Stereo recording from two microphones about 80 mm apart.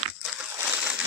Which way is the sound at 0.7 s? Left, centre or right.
Centre.